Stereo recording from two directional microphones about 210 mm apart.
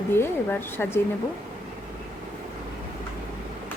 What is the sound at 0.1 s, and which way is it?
Speech, 10° left (ahead or behind).